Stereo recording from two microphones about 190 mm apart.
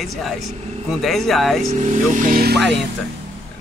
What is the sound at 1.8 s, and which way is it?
Speech, 40° right (ahead or behind).